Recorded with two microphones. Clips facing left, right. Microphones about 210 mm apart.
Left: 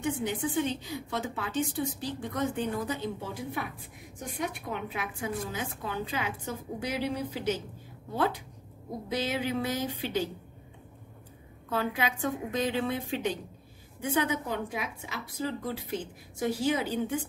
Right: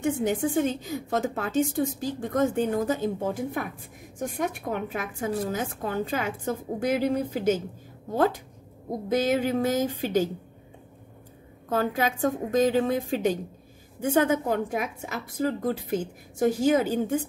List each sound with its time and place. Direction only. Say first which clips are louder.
0.0 s a woman's voice: right 6 dB; 45° right (ahead or behind)
11.7 s a woman's voice: right 5 dB; 45° right (ahead or behind)